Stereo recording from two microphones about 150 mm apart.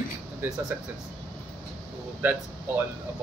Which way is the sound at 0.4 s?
15° right (ahead or behind).